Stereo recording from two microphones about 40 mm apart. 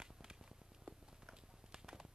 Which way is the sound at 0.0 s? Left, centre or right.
Centre.